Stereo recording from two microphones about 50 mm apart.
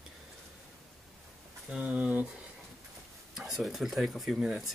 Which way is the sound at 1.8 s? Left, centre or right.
Right.